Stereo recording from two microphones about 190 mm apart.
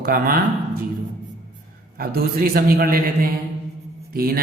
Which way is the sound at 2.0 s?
50° right (ahead or behind).